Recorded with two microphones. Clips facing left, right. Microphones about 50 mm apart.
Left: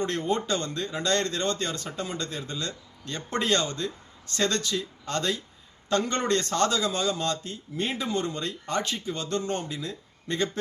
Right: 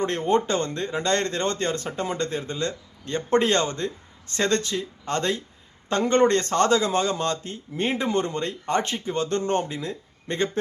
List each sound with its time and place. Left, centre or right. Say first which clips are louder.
0.0 s speech: right 5 dB; right